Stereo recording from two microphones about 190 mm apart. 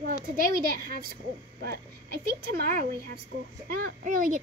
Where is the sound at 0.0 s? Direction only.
55° right (ahead or behind).